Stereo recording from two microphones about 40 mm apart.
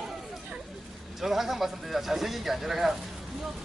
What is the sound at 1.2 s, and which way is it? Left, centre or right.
Speech, centre.